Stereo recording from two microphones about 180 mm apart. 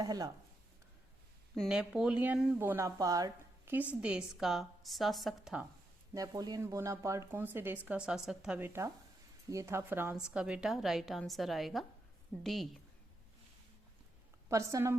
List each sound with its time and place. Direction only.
0.0 s speech: 20° right (ahead or behind)
1.5 s speech: centre (ahead or behind); by 3.8 s 20° right (ahead or behind)
4.0 s a woman's voice: 5° right (ahead or behind)
6.1 s a woman's voice: 20° right (ahead or behind); by 12.8 s centre (ahead or behind)
14.5 s speech: 15° right (ahead or behind)